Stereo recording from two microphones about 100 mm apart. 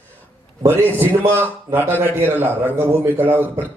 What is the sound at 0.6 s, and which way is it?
A man's voice, 20° right (ahead or behind).